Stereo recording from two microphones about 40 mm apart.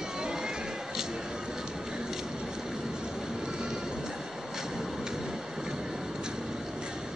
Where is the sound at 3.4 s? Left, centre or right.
Centre.